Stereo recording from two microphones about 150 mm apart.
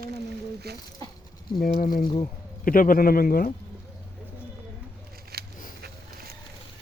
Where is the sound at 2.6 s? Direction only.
65° left (ahead or behind).